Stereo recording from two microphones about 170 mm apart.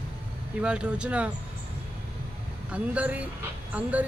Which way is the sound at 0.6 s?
5° right (ahead or behind).